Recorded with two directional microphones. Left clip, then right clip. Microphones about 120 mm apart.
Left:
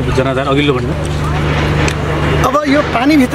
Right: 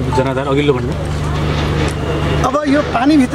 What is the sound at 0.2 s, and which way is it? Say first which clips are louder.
Speech: left 3 dB; 35° right (ahead or behind).